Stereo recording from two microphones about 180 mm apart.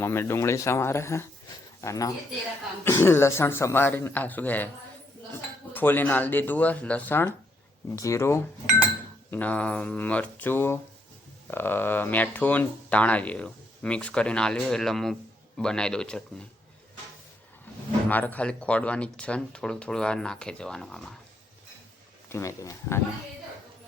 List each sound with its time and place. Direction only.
0.0 s speech: 15° left (ahead or behind)
5.7 s speech: 10° left (ahead or behind)
18.1 s speech: 10° left (ahead or behind)
22.3 s speech: 15° left (ahead or behind)